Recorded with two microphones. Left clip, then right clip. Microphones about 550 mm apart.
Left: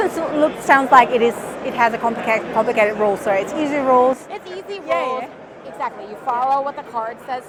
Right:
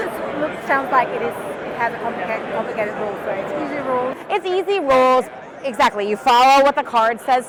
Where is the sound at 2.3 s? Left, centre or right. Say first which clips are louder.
Left 5 dB; left.